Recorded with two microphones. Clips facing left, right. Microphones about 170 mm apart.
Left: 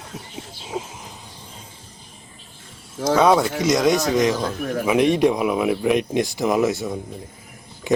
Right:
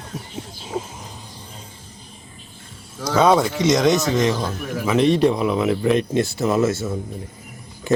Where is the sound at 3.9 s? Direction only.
25° right (ahead or behind).